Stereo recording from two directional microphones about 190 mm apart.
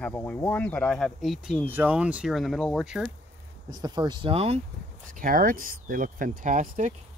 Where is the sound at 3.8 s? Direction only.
25° right (ahead or behind).